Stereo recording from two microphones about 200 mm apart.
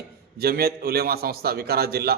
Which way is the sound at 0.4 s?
50° right (ahead or behind).